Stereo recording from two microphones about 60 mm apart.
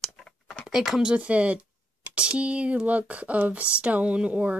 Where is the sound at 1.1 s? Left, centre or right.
Right.